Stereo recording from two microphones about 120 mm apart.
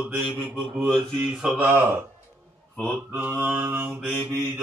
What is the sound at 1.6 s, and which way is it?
Speech, 15° right (ahead or behind).